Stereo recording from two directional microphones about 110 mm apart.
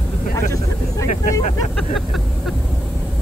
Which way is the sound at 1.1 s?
90° left.